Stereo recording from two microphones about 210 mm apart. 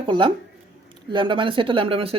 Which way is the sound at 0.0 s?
25° right (ahead or behind).